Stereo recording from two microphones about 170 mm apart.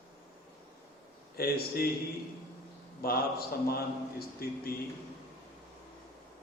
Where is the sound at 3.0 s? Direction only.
65° left (ahead or behind).